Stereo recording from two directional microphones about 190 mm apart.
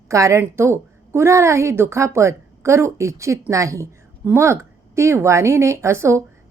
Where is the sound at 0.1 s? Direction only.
15° right (ahead or behind).